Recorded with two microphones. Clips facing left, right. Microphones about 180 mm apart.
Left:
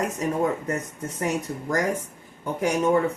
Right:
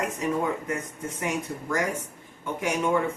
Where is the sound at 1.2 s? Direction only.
40° left (ahead or behind).